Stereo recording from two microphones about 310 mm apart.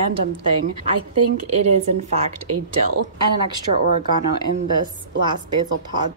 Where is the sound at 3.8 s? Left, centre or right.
Right.